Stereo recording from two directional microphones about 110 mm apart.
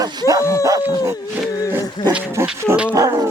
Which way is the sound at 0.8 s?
20° right (ahead or behind).